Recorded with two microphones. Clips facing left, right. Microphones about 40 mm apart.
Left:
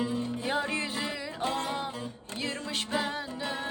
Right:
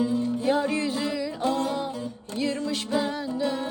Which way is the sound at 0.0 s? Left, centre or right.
Left.